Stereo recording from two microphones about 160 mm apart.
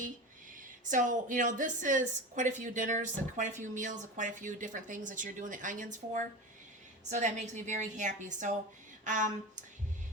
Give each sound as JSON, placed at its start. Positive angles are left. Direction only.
{"t": 0.5, "sound": "a woman's voice", "side_deg": -55}